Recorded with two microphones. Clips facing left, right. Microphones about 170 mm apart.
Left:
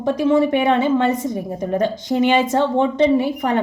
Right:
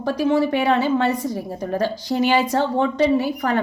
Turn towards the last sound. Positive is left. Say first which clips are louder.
# left 2 dB
turn(degrees=25)  # may be behind; listen again after turning